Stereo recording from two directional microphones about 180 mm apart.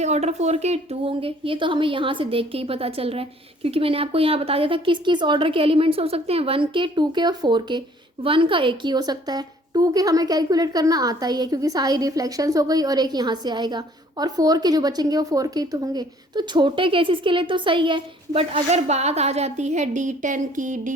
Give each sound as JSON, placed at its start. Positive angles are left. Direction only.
{"t": 0.0, "sound": "a woman's voice", "side_deg": -40}